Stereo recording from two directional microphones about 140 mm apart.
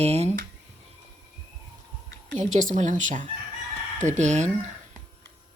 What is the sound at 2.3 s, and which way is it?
A woman's voice, 60° right (ahead or behind).